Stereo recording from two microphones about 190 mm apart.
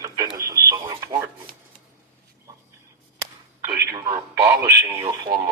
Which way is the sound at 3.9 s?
20° right (ahead or behind).